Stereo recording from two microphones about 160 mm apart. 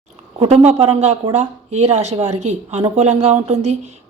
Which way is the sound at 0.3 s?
40° right (ahead or behind).